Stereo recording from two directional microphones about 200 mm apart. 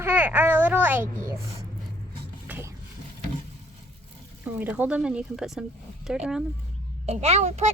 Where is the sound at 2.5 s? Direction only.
10° right (ahead or behind).